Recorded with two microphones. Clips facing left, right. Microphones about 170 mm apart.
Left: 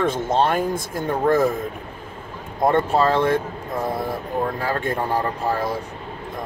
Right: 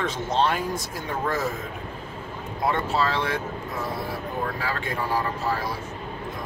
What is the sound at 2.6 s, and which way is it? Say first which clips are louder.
Speech: left 7 dB; 50° left (ahead or behind).